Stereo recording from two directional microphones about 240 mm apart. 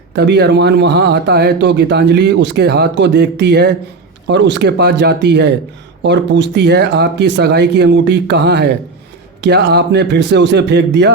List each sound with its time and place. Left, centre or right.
0.1 s speech: right